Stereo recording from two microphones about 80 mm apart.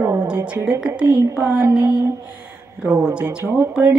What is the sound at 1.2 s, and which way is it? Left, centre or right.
Speech, right.